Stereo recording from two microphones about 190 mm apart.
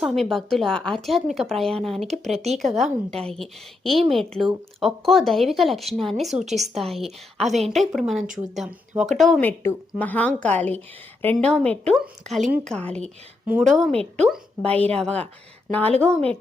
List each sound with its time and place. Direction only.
0.0 s speech: centre (ahead or behind)
9.4 s a woman's voice: 10° left (ahead or behind)
13.9 s a woman's voice: 30° right (ahead or behind)
14.3 s a woman's voice: 5° left (ahead or behind)